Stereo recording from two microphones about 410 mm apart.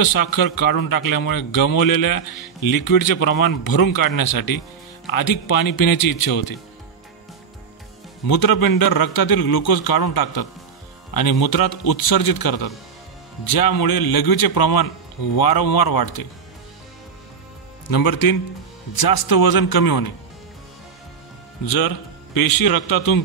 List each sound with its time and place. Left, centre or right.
0.0 s a man's voice: left
8.3 s a man's voice: left
17.8 s a man's voice: left
21.6 s a man's voice: left